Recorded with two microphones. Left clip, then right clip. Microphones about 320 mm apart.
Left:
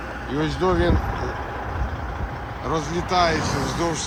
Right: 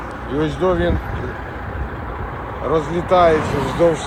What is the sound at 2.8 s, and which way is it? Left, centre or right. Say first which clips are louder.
Speech: right 7 dB; centre.